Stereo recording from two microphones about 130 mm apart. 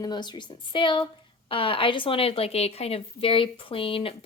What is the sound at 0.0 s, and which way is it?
A woman's voice, 35° left (ahead or behind).